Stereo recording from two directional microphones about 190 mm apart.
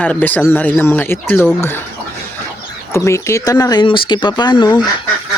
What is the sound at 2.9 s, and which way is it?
Speech, 15° left (ahead or behind).